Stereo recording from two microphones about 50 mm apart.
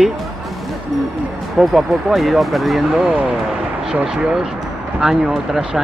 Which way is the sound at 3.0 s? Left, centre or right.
Right.